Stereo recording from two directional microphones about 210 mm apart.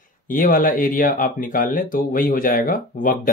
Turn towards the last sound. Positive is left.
turn(degrees=40)  # may be behind; listen again after turning